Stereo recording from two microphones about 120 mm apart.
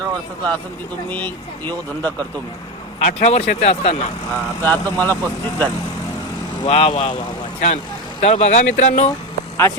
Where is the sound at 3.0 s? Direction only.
80° left; by 4.1 s 65° left (ahead or behind).